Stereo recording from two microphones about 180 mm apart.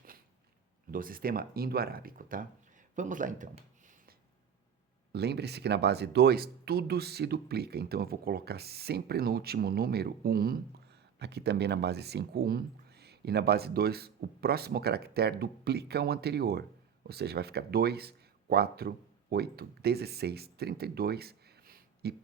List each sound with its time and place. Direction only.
0.9 s speech: 50° right (ahead or behind)
5.1 s speech: 65° right (ahead or behind)
11.2 s speech: 65° right (ahead or behind)